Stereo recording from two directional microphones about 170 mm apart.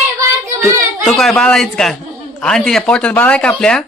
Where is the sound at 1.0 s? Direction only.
Centre (ahead or behind).